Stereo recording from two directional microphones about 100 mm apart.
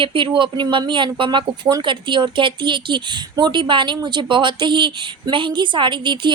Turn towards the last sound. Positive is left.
turn(degrees=-55)  # may be behind; listen again after turning